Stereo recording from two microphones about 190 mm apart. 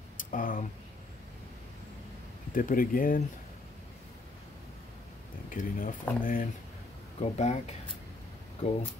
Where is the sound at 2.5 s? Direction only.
45° left (ahead or behind).